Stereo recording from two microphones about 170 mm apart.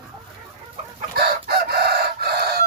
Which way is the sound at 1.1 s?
65° right (ahead or behind).